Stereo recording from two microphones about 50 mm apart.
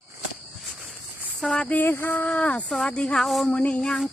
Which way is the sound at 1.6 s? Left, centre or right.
Left.